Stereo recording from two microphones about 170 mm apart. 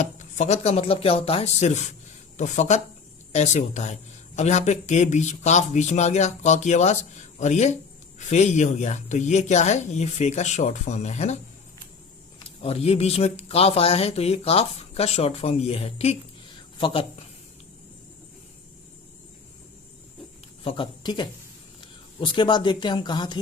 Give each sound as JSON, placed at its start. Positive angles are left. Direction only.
{"t": 0.0, "sound": "speech", "side_deg": 45}
{"t": 12.6, "sound": "speech", "side_deg": 35}
{"t": 20.7, "sound": "speech", "side_deg": 30}